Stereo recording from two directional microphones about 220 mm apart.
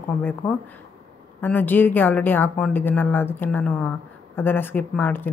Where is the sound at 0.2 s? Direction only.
10° left (ahead or behind).